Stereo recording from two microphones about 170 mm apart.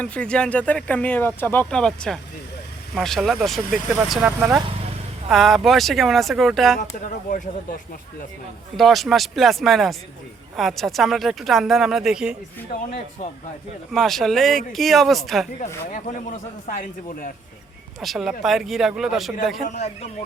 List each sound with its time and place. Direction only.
0.0 s speech: 5° left (ahead or behind); by 4.6 s 10° right (ahead or behind)
5.3 s speech: centre (ahead or behind)
8.7 s speech: centre (ahead or behind)
13.9 s speech: centre (ahead or behind)
15.6 s a man's voice: 45° left (ahead or behind)
18.0 s speech: centre (ahead or behind)
19.6 s a man's voice: 40° left (ahead or behind)